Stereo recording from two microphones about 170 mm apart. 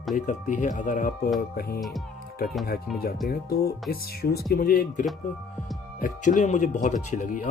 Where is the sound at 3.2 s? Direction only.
60° left (ahead or behind).